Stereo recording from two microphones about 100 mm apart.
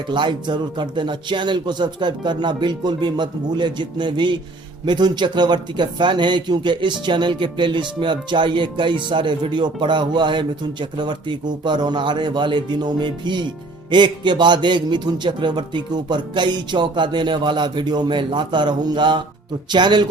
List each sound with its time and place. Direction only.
0.1 s a man's voice: 50° right (ahead or behind)